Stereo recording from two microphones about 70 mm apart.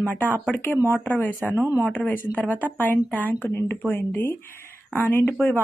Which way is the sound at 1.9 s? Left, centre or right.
Left.